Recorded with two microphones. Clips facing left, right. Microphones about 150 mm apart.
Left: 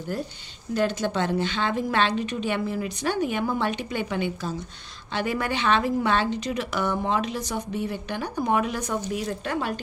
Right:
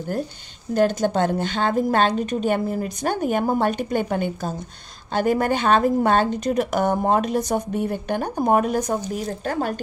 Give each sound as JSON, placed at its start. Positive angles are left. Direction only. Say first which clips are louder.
{"t": 0.7, "sound": "speech", "louder": "right 5 dB", "side_deg": -45}